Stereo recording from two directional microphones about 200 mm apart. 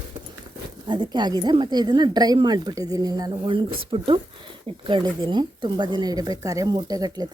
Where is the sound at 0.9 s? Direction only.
20° right (ahead or behind).